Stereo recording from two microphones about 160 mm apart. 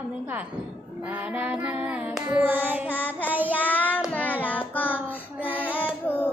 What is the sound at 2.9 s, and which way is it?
Child singing, 10° left (ahead or behind).